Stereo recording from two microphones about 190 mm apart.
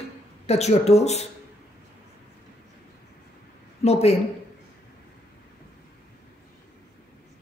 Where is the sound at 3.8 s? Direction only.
35° left (ahead or behind).